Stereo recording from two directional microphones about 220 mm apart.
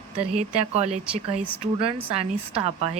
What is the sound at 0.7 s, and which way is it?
Speech, 30° right (ahead or behind).